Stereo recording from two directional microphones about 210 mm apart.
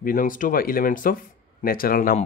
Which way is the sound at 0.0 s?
40° left (ahead or behind).